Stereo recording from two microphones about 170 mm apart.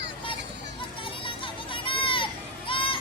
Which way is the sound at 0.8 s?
30° left (ahead or behind).